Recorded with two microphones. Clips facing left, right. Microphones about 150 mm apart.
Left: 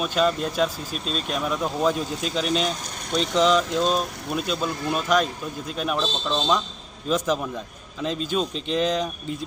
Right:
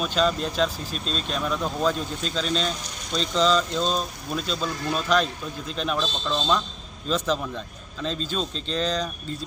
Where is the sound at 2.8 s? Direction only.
60° left (ahead or behind).